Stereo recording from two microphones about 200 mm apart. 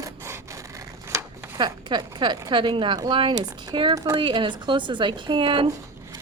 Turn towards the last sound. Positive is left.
turn(degrees=-25)  # may be behind; listen again after turning